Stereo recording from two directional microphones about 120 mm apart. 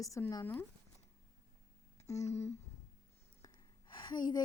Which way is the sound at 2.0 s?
25° left (ahead or behind).